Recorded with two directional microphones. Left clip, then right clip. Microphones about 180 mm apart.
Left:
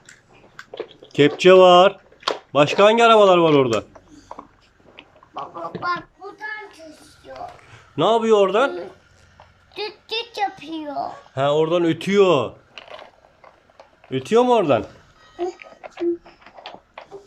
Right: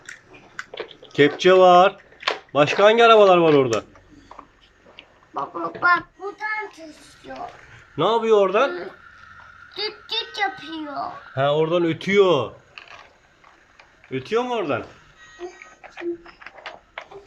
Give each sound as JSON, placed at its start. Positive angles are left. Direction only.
{"t": 1.0, "sound": "speech", "side_deg": 10}
{"t": 5.3, "sound": "a sound", "side_deg": 0}
{"t": 6.3, "sound": "child singing", "side_deg": 0}
{"t": 7.3, "sound": "a man's voice", "side_deg": 5}
{"t": 9.7, "sound": "child singing", "side_deg": 15}
{"t": 10.6, "sound": "a child's voice", "side_deg": 20}
{"t": 11.0, "sound": "speech", "side_deg": 0}
{"t": 14.1, "sound": "speech", "side_deg": 15}
{"t": 15.4, "sound": "music", "side_deg": 65}